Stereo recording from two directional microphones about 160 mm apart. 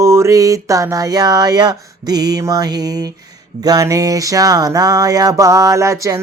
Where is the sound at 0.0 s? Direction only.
15° right (ahead or behind).